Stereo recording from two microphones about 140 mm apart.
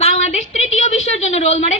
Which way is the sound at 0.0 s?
50° left (ahead or behind).